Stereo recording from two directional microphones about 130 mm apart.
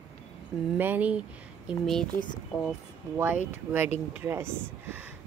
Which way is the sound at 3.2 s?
15° right (ahead or behind).